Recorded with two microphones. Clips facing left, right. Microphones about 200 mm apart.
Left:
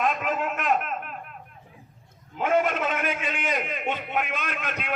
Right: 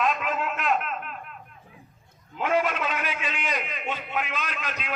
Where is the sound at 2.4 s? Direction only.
50° left (ahead or behind).